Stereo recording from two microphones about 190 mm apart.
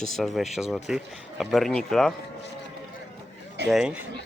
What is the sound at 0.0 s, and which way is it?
Speech, centre (ahead or behind).